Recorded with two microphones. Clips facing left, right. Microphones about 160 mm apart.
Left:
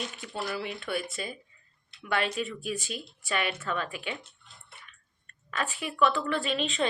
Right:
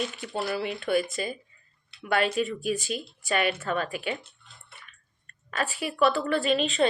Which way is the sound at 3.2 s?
55° right (ahead or behind).